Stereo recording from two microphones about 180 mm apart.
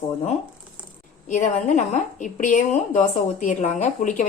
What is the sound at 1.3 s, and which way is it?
A woman's voice, 40° left (ahead or behind).